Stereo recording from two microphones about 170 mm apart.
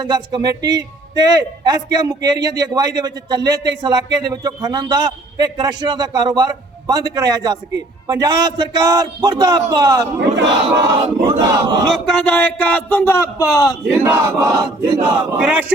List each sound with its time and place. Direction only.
0.0 s a man's voice: 25° right (ahead or behind)
10.2 s speech: 90° right
10.9 s a man's voice: 30° right (ahead or behind)
12.0 s speech: 5° left (ahead or behind); by 13.7 s 20° left (ahead or behind)
13.9 s a man's voice: 15° right (ahead or behind)